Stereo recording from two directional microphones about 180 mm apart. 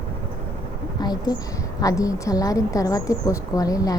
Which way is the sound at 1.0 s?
20° left (ahead or behind).